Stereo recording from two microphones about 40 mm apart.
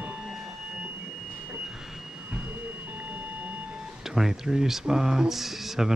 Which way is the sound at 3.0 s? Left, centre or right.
Right.